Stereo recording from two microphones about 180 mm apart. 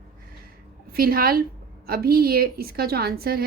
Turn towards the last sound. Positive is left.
turn(degrees=-55)  # may be behind; listen again after turning